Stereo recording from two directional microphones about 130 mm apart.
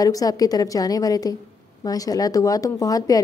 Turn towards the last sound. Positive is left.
turn(degrees=25)  # may be behind; listen again after turning